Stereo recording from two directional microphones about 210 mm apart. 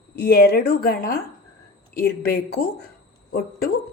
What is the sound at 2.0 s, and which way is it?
A woman's voice, 50° left (ahead or behind).